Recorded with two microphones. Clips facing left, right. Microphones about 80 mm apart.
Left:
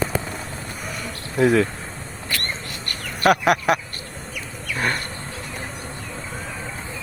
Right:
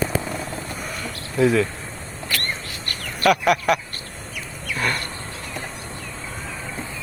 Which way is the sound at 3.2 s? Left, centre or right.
Left.